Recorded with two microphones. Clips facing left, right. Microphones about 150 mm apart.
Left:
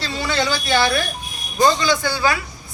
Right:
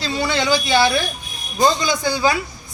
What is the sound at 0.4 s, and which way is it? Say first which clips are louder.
A man's voice: right 3 dB; 15° right (ahead or behind).